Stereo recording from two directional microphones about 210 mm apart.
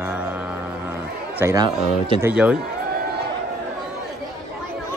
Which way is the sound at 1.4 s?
15° right (ahead or behind).